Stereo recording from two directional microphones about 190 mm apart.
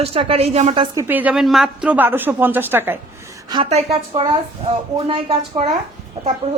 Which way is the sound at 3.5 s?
25° right (ahead or behind).